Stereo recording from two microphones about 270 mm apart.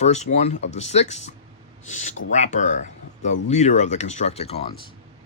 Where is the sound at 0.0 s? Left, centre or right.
Left.